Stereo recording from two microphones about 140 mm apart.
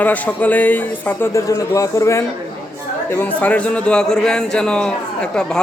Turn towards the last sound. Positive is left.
turn(degrees=5)  # may be behind; listen again after turning